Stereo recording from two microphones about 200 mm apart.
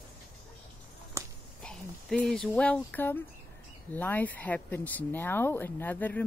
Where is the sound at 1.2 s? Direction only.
15° right (ahead or behind).